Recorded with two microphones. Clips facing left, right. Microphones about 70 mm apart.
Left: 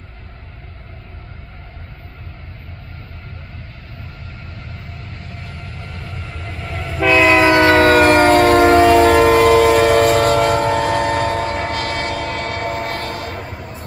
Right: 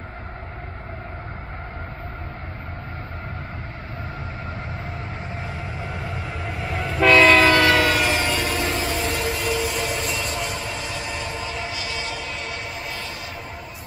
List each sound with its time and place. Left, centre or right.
5.3 s train: centre
7.1 s train: centre; by 13.5 s left